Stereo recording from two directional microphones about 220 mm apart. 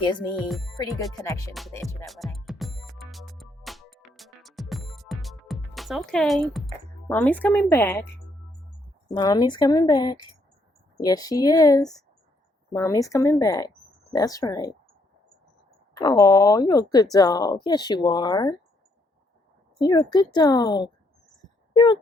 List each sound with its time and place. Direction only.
0.4 s speech: centre (ahead or behind)
0.8 s speech: 15° left (ahead or behind)
1.8 s music: centre (ahead or behind)
7.1 s speech: 10° left (ahead or behind)
9.1 s speech: 20° left (ahead or behind)
16.0 s speech: 15° left (ahead or behind)
19.8 s speech: 20° left (ahead or behind)